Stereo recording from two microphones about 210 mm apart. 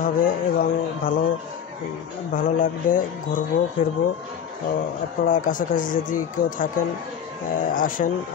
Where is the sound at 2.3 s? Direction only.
40° left (ahead or behind).